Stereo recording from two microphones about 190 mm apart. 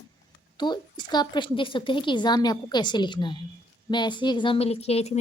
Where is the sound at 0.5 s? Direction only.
25° left (ahead or behind).